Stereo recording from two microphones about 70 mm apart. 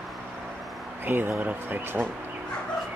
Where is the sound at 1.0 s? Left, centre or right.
Right.